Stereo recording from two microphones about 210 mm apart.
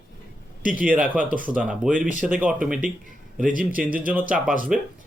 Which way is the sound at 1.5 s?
5° right (ahead or behind).